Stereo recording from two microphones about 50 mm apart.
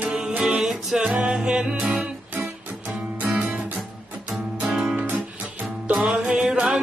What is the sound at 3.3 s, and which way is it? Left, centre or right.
Music, right.